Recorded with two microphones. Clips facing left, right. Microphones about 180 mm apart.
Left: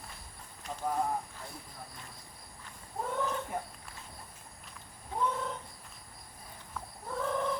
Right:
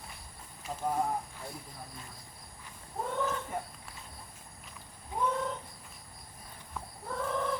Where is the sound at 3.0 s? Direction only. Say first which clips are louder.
Right 1 dB; centre (ahead or behind).